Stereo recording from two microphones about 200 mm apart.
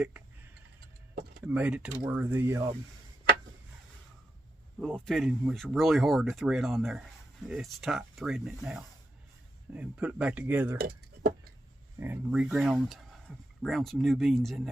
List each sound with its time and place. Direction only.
1.5 s speech: 5° right (ahead or behind)
4.8 s speech: 5° left (ahead or behind)
10.8 s speech: 50° right (ahead or behind)
11.9 s speech: 10° right (ahead or behind)